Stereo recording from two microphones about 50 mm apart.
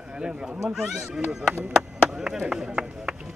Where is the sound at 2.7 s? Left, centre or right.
Centre.